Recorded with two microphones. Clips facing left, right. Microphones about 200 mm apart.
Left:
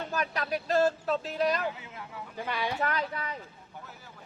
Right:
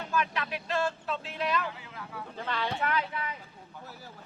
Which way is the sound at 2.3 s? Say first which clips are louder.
Left 1 dB; 10° left (ahead or behind).